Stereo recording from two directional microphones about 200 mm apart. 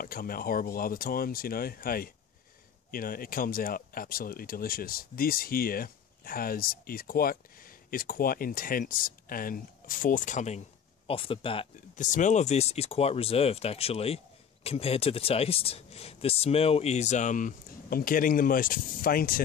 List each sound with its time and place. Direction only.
0.0 s speech: 45° left (ahead or behind); by 11.6 s 25° left (ahead or behind)
11.9 s speech: 40° left (ahead or behind)